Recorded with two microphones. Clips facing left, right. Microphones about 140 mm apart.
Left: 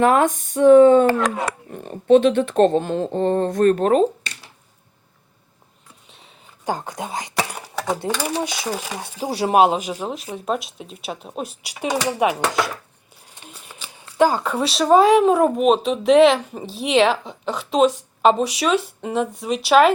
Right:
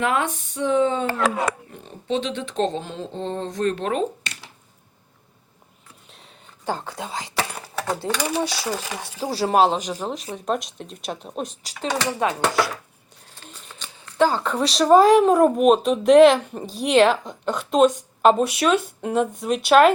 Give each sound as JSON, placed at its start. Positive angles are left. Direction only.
{"t": 0.0, "sound": "speech", "side_deg": 45}
{"t": 6.7, "sound": "speech", "side_deg": 15}
{"t": 7.8, "sound": "speech", "side_deg": 5}
{"t": 13.3, "sound": "a sound", "side_deg": 10}
{"t": 14.0, "sound": "speech", "side_deg": 10}